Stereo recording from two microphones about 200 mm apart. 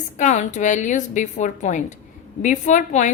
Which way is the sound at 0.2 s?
35° left (ahead or behind).